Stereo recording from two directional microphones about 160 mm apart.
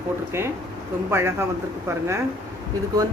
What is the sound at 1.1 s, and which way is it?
Speech, 15° right (ahead or behind).